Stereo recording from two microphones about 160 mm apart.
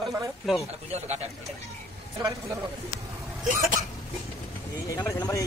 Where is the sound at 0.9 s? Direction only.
40° right (ahead or behind).